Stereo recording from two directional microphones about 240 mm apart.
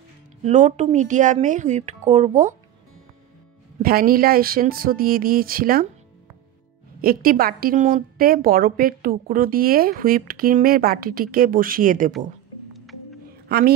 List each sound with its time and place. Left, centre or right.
0.4 s a woman's voice: right
3.8 s a woman's voice: right
7.0 s a woman's voice: right